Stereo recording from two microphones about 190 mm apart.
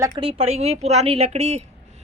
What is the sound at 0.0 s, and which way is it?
Speech, 30° right (ahead or behind).